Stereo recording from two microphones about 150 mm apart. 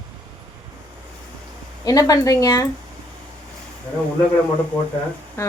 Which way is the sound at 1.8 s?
25° left (ahead or behind).